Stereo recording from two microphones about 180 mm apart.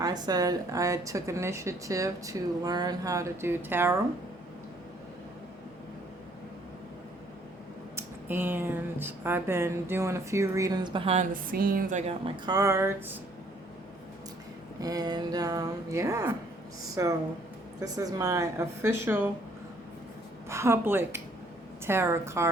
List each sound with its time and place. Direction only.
0.0 s a woman's voice: 20° right (ahead or behind)
7.9 s a woman's voice: 10° right (ahead or behind); by 11.3 s 35° right (ahead or behind)
11.5 s a woman's voice: 55° right (ahead or behind)
12.5 s a woman's voice: 20° right (ahead or behind)
14.8 s a woman's voice: 20° right (ahead or behind)
20.5 s a woman's voice: 15° right (ahead or behind)